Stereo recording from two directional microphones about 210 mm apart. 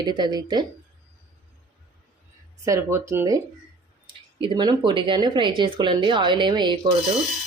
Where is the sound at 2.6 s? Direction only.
15° right (ahead or behind).